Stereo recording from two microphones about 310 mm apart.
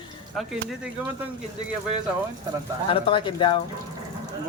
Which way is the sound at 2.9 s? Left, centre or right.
Centre.